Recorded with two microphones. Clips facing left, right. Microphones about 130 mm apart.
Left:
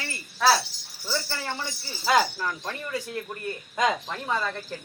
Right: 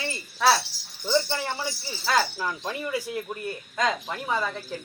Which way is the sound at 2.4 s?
10° right (ahead or behind).